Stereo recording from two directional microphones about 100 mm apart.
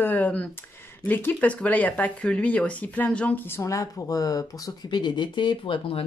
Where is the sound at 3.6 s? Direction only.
30° left (ahead or behind).